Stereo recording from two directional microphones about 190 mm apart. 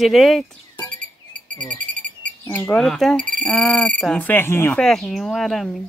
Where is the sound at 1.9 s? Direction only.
40° right (ahead or behind).